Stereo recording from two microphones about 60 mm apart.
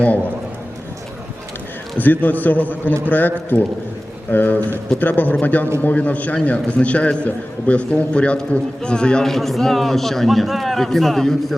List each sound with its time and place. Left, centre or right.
2.0 s a man's voice: left; by 9.3 s centre
9.3 s a man's voice: centre